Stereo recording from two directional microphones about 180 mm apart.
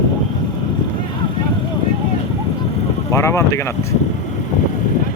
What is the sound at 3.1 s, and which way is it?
Speech, 15° left (ahead or behind).